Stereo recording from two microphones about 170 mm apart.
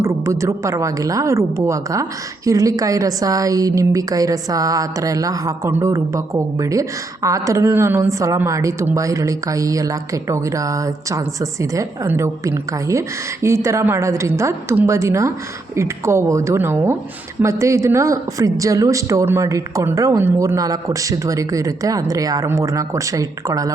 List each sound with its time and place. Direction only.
0.0 s a woman's voice: 15° right (ahead or behind)